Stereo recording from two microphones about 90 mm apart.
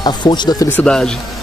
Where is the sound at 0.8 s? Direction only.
5° left (ahead or behind).